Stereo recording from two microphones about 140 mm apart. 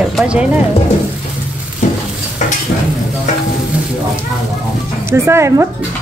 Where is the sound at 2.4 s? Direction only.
60° left (ahead or behind).